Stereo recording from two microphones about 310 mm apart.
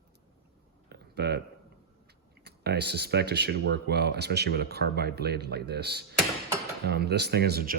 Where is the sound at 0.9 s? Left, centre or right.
Right.